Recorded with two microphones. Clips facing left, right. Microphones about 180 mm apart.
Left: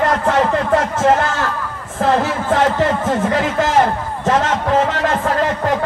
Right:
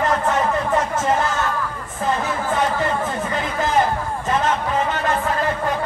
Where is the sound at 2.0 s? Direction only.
90° left.